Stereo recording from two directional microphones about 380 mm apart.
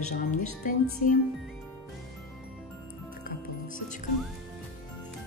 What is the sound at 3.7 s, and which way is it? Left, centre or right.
Music, centre.